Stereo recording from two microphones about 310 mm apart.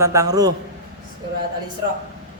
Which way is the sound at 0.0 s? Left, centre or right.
Centre.